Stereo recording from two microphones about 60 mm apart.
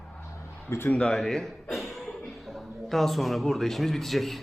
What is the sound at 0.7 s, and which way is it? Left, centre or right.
Speech, left.